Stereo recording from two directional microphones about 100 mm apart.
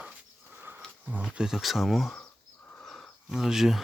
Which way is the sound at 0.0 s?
15° right (ahead or behind).